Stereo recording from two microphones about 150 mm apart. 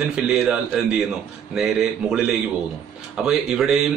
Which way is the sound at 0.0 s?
5° right (ahead or behind).